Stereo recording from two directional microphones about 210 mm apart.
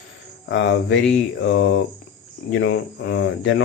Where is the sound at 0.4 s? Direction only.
60° left (ahead or behind).